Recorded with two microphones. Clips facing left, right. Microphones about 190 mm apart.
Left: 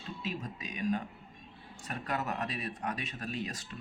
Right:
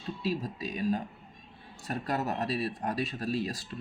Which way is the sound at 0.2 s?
35° right (ahead or behind).